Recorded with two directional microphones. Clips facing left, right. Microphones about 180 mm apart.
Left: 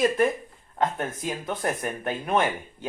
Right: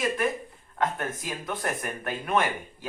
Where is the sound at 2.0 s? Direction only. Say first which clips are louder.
Left 1 dB; 25° left (ahead or behind).